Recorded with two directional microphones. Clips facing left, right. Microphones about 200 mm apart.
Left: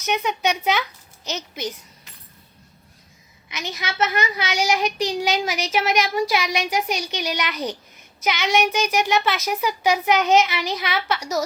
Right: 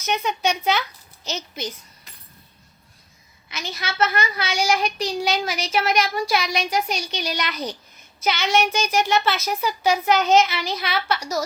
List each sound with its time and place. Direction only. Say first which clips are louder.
1.2 s a child's voice: left 1 dB; 10° left (ahead or behind)
3.5 s a child's voice: left 1 dB; 15° left (ahead or behind)